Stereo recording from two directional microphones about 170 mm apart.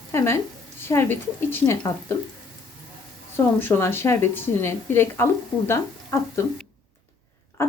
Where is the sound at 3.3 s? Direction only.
15° left (ahead or behind).